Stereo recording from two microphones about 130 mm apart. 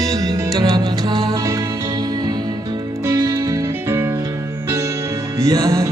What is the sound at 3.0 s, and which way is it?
Music, 25° right (ahead or behind).